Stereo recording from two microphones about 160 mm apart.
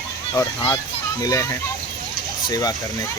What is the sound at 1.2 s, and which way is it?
Speech, 20° left (ahead or behind).